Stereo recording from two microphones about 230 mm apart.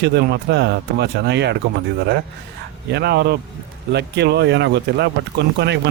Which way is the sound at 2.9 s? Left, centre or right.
Right.